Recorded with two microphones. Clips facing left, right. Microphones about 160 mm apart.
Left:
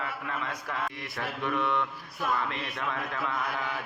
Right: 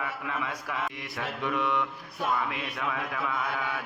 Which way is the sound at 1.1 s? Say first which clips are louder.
Even; 15° right (ahead or behind).